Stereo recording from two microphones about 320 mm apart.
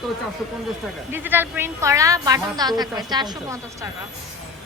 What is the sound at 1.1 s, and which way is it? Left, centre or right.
A woman's voice, centre.